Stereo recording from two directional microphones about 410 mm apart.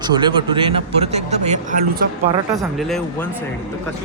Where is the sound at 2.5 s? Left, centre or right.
Centre.